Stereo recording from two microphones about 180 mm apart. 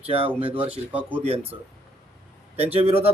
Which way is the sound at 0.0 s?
30° right (ahead or behind).